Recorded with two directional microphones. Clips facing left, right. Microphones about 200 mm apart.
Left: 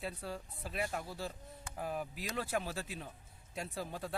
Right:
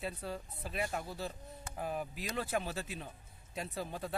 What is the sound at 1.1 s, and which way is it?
Speech, 20° right (ahead or behind).